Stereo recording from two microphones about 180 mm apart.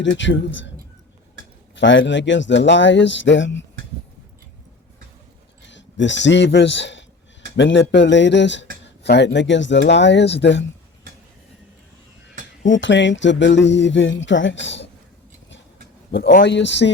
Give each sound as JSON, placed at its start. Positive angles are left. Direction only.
{"t": 0.0, "sound": "speech", "side_deg": 90}
{"t": 1.7, "sound": "speech", "side_deg": 90}
{"t": 5.6, "sound": "speech", "side_deg": 90}
{"t": 12.6, "sound": "speech", "side_deg": 90}
{"t": 13.6, "sound": "speech", "side_deg": 80}
{"t": 16.4, "sound": "speech", "side_deg": 85}